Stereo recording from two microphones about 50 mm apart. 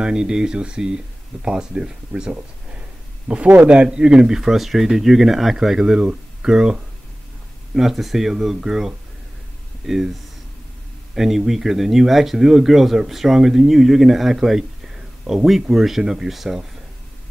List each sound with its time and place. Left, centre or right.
0.0 s speech: centre
3.3 s speech: right; by 6.8 s centre
7.7 s speech: centre
11.1 s speech: centre